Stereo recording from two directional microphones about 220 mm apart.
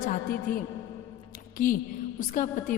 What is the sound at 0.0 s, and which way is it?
Speech, 40° left (ahead or behind).